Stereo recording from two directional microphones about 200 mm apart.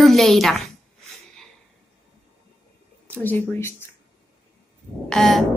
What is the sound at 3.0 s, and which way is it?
Speech, 10° left (ahead or behind).